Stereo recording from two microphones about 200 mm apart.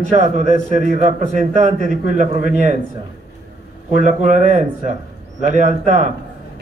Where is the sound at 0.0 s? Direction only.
35° right (ahead or behind).